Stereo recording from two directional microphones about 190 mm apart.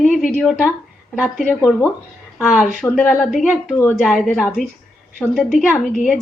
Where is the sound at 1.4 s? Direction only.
10° left (ahead or behind).